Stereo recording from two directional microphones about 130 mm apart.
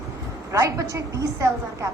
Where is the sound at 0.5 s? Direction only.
25° right (ahead or behind).